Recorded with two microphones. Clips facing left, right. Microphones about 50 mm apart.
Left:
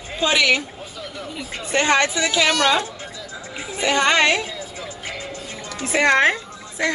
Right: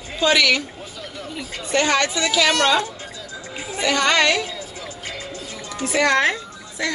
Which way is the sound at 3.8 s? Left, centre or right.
Left.